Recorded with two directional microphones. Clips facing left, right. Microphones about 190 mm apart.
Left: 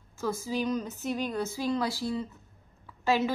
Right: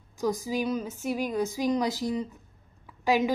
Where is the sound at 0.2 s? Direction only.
15° right (ahead or behind).